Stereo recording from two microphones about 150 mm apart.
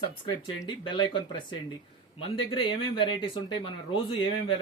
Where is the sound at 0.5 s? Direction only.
30° left (ahead or behind).